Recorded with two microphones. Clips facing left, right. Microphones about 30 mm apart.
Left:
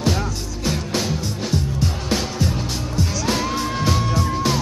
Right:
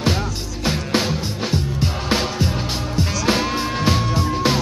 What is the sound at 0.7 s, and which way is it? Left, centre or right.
Music, right.